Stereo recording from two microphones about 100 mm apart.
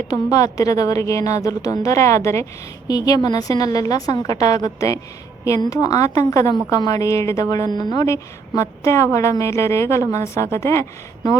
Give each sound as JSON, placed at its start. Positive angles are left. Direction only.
{"t": 0.1, "sound": "a woman's voice", "side_deg": 35}
{"t": 8.0, "sound": "a woman's voice", "side_deg": 30}